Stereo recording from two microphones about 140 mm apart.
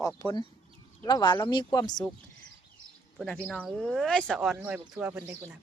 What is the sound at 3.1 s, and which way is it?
Speech, 5° left (ahead or behind).